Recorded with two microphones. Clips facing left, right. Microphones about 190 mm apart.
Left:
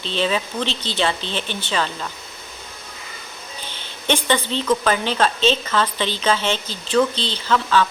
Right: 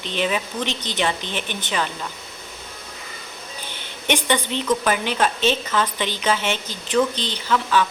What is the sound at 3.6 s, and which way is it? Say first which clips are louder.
A woman's voice: left 2 dB; 15° right (ahead or behind).